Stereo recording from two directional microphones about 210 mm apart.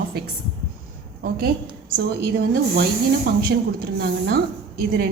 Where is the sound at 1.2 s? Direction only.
45° right (ahead or behind).